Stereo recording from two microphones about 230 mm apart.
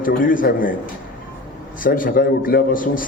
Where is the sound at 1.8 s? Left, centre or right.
Left.